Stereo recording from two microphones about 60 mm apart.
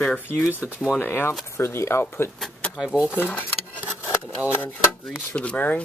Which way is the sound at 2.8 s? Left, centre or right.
Centre.